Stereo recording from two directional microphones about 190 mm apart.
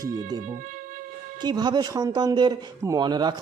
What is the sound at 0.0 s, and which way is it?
Speech, 20° right (ahead or behind).